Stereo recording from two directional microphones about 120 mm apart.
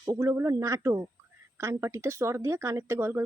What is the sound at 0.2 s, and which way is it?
Speech, 25° right (ahead or behind).